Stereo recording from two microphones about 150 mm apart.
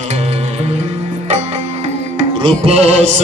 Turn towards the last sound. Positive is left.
turn(degrees=-45)  # may be behind; listen again after turning